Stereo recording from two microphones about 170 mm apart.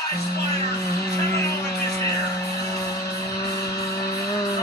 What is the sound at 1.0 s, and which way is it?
Music, 20° left (ahead or behind).